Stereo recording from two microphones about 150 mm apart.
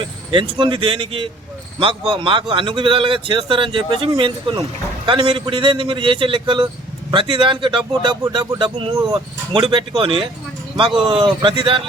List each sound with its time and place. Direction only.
0.0 s a man's voice: 35° right (ahead or behind)